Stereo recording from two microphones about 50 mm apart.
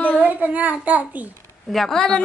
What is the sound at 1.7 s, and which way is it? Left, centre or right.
Speech, centre.